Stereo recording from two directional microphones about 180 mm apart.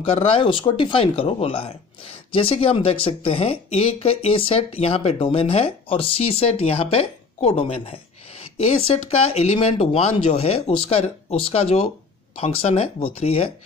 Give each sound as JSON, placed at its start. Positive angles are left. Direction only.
{"t": 0.0, "sound": "speech", "side_deg": 30}